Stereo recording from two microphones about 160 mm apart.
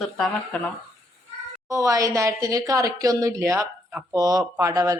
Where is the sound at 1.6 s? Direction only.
20° right (ahead or behind).